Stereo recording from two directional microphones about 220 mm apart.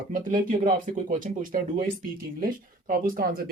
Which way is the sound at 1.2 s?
40° right (ahead or behind).